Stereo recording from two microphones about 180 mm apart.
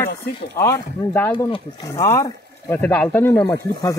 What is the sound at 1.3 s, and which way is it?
Speech, 30° left (ahead or behind).